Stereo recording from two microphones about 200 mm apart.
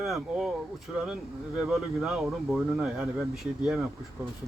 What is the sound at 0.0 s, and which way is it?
Speech, centre (ahead or behind).